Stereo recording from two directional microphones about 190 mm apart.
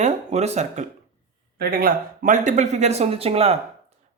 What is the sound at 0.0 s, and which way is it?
Speech, 35° right (ahead or behind).